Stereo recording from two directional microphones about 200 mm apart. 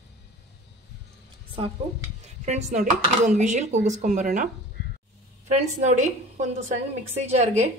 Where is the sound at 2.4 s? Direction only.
35° right (ahead or behind).